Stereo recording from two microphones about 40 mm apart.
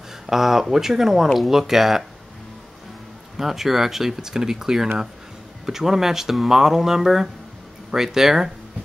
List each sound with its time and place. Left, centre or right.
0.3 s speech: centre
3.3 s speech: centre